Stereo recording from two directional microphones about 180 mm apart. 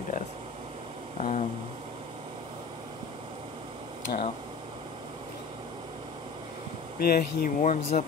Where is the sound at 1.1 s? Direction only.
40° left (ahead or behind).